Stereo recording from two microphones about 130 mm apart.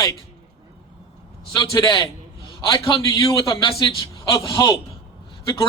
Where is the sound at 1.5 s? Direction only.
30° left (ahead or behind).